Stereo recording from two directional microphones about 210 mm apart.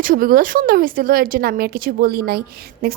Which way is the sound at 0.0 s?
40° right (ahead or behind).